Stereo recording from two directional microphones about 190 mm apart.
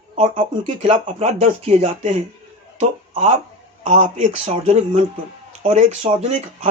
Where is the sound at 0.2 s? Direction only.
30° right (ahead or behind).